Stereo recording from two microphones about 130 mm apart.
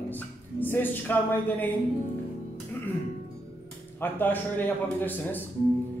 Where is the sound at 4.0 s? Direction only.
15° left (ahead or behind).